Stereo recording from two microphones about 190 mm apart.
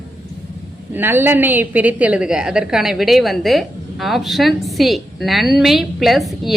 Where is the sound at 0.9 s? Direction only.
10° right (ahead or behind).